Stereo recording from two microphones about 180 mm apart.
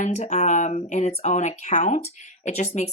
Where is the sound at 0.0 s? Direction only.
40° left (ahead or behind).